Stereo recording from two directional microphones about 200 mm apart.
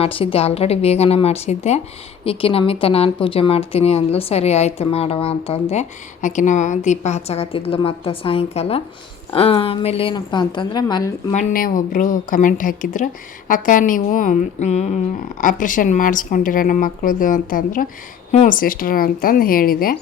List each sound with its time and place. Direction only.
0.0 s a woman's voice: 25° left (ahead or behind)
11.3 s a woman's voice: 45° left (ahead or behind)